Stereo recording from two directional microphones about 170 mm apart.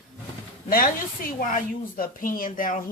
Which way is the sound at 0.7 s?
60° left (ahead or behind).